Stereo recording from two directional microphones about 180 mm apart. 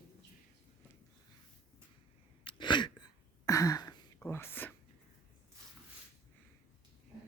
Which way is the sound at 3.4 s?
20° left (ahead or behind).